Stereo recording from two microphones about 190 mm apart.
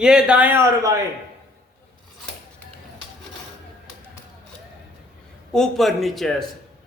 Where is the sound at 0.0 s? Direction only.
5° right (ahead or behind).